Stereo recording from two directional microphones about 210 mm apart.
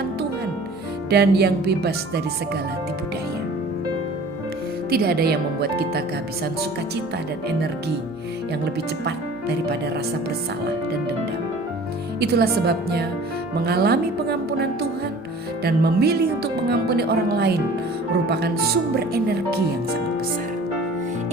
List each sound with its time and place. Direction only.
1.1 s speech: 50° right (ahead or behind)
4.9 s speech: 45° right (ahead or behind)
9.0 s speech: 50° right (ahead or behind)
12.2 s speech: 50° right (ahead or behind)